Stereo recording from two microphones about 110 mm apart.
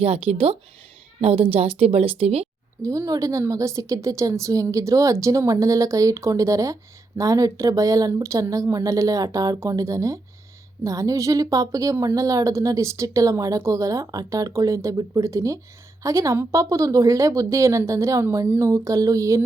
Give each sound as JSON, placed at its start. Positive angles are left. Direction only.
{"t": 0.0, "sound": "a woman's voice", "side_deg": -70}
{"t": 2.8, "sound": "a woman's voice", "side_deg": -30}